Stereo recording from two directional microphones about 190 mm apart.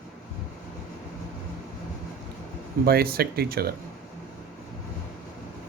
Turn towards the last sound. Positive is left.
turn(degrees=-55)  # may be behind; listen again after turning